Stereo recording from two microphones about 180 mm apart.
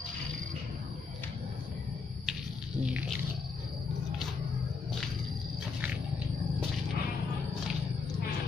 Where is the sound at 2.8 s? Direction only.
5° right (ahead or behind).